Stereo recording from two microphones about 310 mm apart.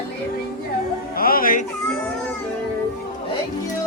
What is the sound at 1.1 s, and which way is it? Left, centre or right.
Music, left.